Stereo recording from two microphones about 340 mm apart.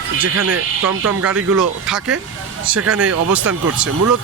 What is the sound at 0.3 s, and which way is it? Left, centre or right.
Speech, right.